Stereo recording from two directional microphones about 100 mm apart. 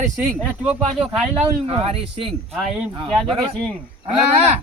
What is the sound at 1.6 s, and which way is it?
Speech, 70° right (ahead or behind).